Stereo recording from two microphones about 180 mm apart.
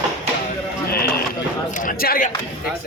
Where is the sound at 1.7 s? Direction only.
50° left (ahead or behind).